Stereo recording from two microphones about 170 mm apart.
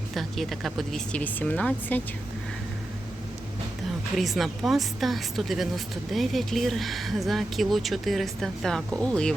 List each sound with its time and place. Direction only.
0.1 s speech: centre (ahead or behind)
4.2 s speech: centre (ahead or behind)